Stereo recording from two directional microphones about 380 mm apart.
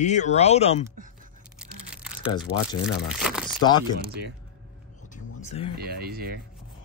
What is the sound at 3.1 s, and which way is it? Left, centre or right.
Crumpling, centre.